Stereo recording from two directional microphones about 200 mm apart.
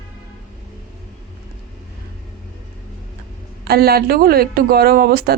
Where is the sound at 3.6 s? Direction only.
50° right (ahead or behind).